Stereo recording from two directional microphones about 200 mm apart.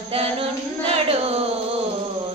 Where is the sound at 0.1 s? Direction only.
30° right (ahead or behind).